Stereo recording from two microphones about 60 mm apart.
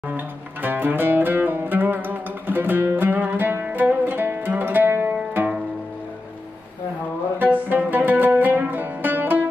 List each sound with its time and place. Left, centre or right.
0.1 s music: right
7.3 s music: right